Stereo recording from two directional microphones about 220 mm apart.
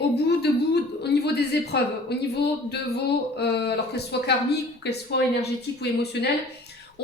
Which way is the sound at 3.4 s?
50° left (ahead or behind).